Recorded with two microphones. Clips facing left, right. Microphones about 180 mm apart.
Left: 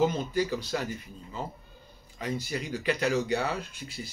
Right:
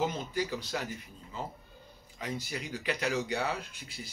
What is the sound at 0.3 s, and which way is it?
Speech, 15° right (ahead or behind).